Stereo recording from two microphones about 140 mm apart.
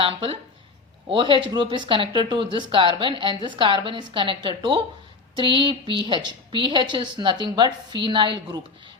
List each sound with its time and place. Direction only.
0.0 s speech: 40° right (ahead or behind)